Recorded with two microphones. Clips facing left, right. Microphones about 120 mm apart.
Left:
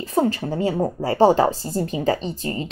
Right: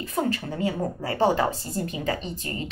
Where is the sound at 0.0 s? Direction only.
35° left (ahead or behind).